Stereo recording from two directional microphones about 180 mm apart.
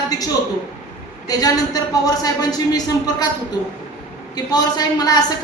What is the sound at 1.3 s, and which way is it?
A woman's voice, 20° left (ahead or behind).